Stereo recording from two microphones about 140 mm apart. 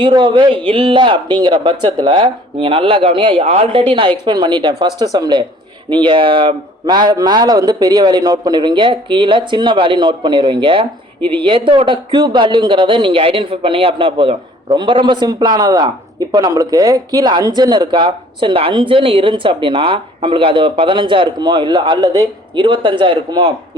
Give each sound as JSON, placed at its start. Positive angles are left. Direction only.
{"t": 0.0, "sound": "a man's voice", "side_deg": -35}